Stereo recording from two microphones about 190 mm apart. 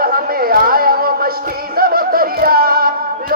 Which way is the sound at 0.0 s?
50° right (ahead or behind).